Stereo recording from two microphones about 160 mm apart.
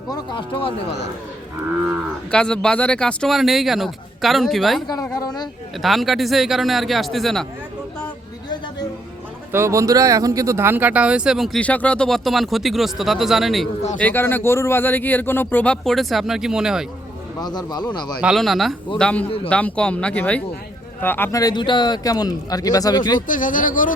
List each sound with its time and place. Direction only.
0.1 s speech: 30° left (ahead or behind)
2.3 s speech: 5° left (ahead or behind)
5.1 s speech: 25° left (ahead or behind)
5.8 s speech: centre (ahead or behind)
9.5 s speech: 15° right (ahead or behind); by 13.7 s centre (ahead or behind)
14.0 s speech: 15° left (ahead or behind); by 16.8 s 5° right (ahead or behind)
17.4 s speech: 25° left (ahead or behind)
18.2 s speech: 5° right (ahead or behind)
21.4 s speech: 30° left (ahead or behind)
23.2 s speech: 55° left (ahead or behind)